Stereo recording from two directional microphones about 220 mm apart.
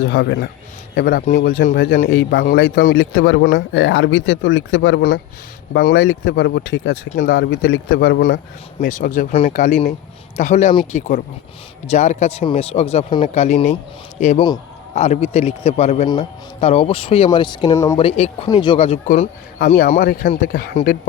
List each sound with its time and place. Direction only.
0.0 s a man's voice: 50° left (ahead or behind); by 19.1 s 25° left (ahead or behind)
19.2 s a man's voice: 40° left (ahead or behind)